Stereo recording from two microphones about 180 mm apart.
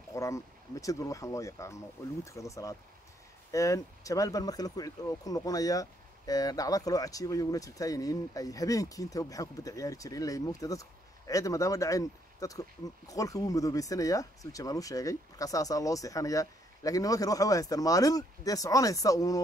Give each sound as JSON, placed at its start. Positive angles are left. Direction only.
{"t": 0.1, "sound": "speech", "side_deg": 15}